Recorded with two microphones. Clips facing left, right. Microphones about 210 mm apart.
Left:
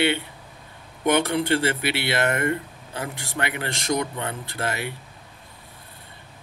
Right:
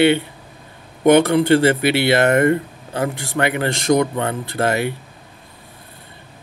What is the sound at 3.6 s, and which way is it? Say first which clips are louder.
Speech: right 9 dB; 70° right (ahead or behind).